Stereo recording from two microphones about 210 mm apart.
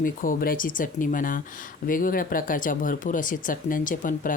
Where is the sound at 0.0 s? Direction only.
40° left (ahead or behind).